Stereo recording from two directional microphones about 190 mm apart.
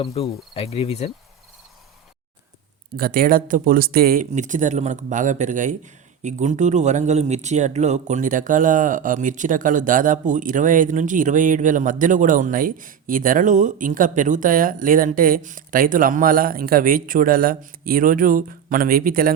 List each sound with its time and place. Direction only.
0.0 s cricket: 30° left (ahead or behind)
2.9 s speech: 50° right (ahead or behind)